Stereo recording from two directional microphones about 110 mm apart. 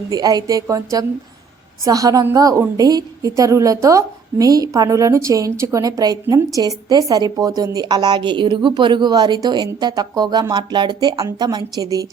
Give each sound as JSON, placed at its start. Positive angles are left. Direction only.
{"t": 0.1, "sound": "a woman's voice", "side_deg": -35}